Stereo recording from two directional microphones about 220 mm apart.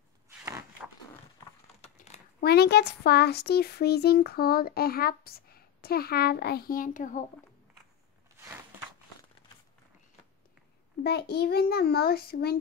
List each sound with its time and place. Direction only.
1.8 s crumpling: 30° left (ahead or behind)
2.4 s speech: 45° left (ahead or behind)
11.1 s speech: 50° left (ahead or behind)